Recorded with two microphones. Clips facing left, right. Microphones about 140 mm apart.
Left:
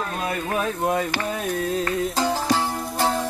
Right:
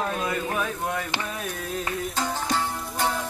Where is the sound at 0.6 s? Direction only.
35° left (ahead or behind).